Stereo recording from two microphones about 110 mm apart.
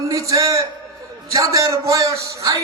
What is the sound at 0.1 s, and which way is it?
A man's voice, 30° right (ahead or behind).